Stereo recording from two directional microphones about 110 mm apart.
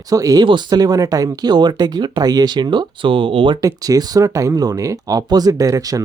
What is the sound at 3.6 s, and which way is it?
Speech, 35° right (ahead or behind).